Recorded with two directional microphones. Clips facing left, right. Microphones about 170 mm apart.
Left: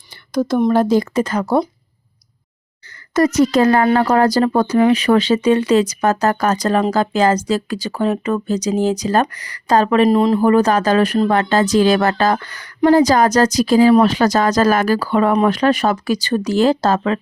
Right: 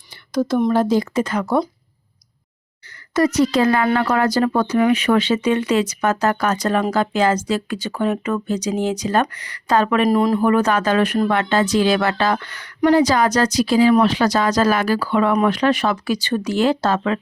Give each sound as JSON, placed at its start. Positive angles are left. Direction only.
{"t": 0.3, "sound": "speech", "side_deg": 40}
{"t": 3.2, "sound": "a woman's voice", "side_deg": 45}